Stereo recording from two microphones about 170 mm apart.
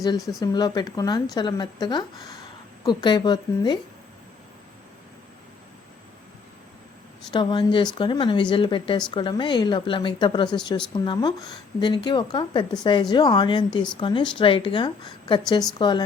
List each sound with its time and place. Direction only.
0.0 s speech: 20° left (ahead or behind)
7.3 s speech: 30° left (ahead or behind)